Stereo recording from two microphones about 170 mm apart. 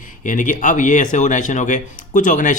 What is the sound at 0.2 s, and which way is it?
Speech, 50° left (ahead or behind).